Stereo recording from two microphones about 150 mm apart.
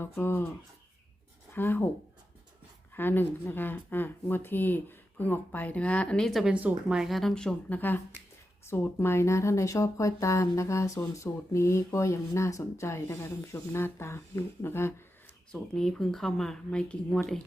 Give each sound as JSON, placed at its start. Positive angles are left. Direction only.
{"t": 0.0, "sound": "speech", "side_deg": 15}
{"t": 1.5, "sound": "speech", "side_deg": 15}
{"t": 2.9, "sound": "speech", "side_deg": 15}
{"t": 15.5, "sound": "speech", "side_deg": 5}